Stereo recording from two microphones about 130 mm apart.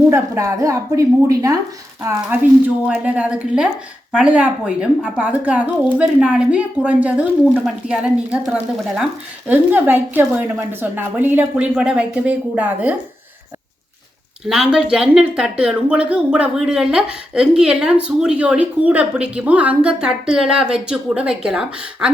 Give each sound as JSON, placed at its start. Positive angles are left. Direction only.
{"t": 0.1, "sound": "a woman's voice", "side_deg": -25}
{"t": 9.5, "sound": "speech", "side_deg": -15}
{"t": 14.4, "sound": "speech", "side_deg": -5}